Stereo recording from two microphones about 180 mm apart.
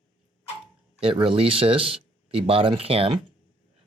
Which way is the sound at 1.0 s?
30° right (ahead or behind).